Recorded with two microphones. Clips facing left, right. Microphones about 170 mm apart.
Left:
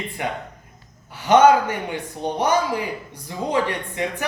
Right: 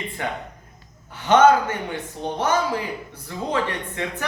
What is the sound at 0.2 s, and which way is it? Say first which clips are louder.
Speech: left 2 dB; 15° left (ahead or behind).